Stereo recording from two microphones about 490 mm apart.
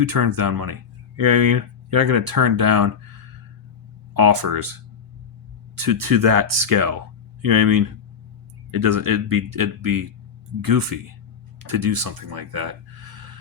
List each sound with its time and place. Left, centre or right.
0.0 s speech: right